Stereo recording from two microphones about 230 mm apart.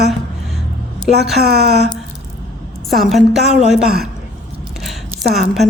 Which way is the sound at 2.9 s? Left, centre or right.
Centre.